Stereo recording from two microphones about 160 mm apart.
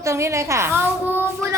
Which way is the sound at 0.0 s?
20° right (ahead or behind).